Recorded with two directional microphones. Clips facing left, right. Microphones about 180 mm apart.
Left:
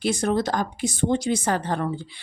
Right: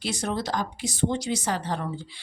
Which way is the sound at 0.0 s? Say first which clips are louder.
Left 6 dB; 50° left (ahead or behind).